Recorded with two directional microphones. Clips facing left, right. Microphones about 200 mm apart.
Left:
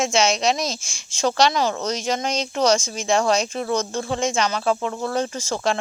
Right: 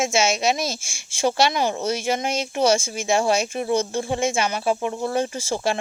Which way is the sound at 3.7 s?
25° right (ahead or behind).